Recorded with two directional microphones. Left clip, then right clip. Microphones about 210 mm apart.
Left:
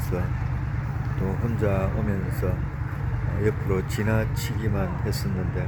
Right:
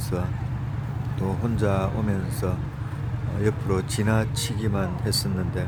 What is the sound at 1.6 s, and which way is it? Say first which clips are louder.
Speech: right 1 dB; 15° right (ahead or behind).